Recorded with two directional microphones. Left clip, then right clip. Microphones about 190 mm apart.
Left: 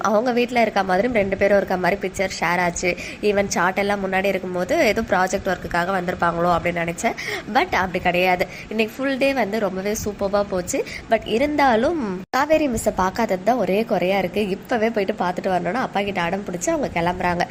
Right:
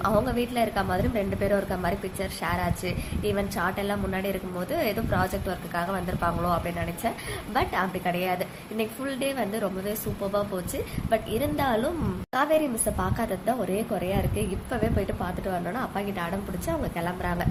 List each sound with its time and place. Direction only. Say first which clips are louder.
0.0 s a woman's voice: left 6 dB; 25° left (ahead or behind)
11.1 s a woman's voice: left 7 dB; 25° left (ahead or behind)